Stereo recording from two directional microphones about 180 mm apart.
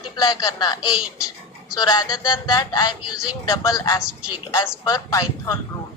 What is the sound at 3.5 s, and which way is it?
Speech, 15° left (ahead or behind).